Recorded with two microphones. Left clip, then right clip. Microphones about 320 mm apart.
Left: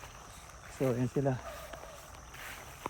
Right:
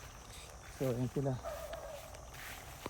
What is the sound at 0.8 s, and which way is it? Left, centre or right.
Speech, centre.